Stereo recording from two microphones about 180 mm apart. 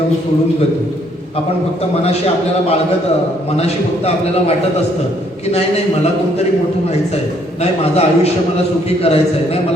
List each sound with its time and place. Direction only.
3.6 s a man's voice: 35° left (ahead or behind)
7.6 s a man's voice: 35° left (ahead or behind)